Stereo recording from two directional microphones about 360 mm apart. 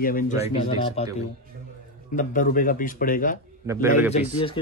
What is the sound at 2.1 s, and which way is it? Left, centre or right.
Speech, left.